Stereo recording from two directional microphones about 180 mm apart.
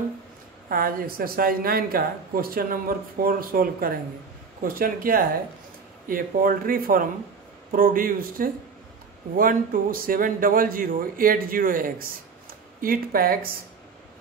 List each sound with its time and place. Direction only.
0.7 s a man's voice: 55° right (ahead or behind)